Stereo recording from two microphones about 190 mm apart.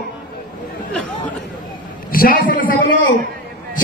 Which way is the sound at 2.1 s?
50° left (ahead or behind).